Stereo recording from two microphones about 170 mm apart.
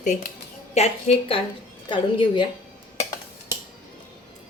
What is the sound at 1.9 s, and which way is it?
Speech, 30° left (ahead or behind).